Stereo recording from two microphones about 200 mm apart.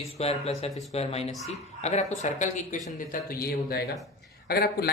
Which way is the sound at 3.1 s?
45° left (ahead or behind).